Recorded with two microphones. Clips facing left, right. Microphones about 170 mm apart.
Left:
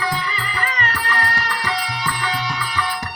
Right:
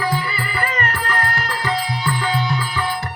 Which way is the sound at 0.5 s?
50° right (ahead or behind).